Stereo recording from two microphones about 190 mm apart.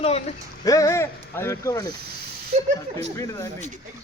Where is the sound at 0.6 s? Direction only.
15° left (ahead or behind).